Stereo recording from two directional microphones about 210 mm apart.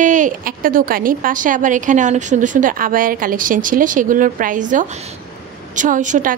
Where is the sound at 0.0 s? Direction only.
35° right (ahead or behind).